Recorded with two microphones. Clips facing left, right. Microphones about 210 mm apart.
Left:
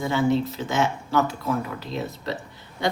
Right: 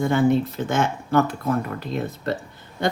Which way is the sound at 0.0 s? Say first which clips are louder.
Right 3 dB; 55° right (ahead or behind).